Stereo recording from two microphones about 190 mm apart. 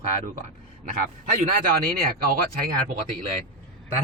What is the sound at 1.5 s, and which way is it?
Speech, 50° right (ahead or behind).